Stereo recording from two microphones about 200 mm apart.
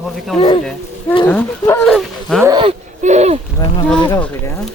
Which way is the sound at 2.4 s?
20° right (ahead or behind).